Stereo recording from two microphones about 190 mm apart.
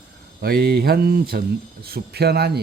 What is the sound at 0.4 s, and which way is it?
Speech, 55° right (ahead or behind).